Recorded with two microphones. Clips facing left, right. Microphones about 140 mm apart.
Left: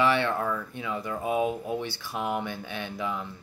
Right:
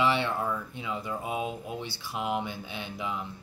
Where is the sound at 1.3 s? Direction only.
25° left (ahead or behind).